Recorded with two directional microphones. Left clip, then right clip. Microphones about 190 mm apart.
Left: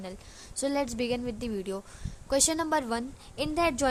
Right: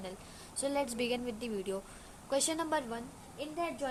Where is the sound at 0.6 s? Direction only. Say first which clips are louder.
Left 4 dB; 35° left (ahead or behind).